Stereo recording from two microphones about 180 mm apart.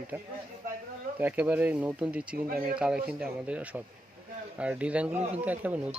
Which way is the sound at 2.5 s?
55° right (ahead or behind).